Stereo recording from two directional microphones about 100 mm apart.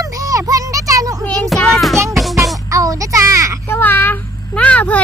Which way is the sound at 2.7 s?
35° right (ahead or behind).